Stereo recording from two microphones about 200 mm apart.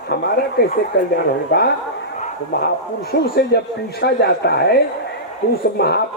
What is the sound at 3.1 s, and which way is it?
Speech, 50° left (ahead or behind).